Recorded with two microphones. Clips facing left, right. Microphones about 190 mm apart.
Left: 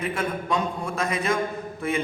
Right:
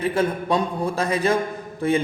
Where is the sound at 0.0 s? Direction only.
35° right (ahead or behind).